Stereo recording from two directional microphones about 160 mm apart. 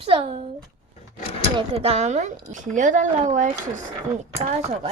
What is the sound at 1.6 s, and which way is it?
Speech, 40° right (ahead or behind).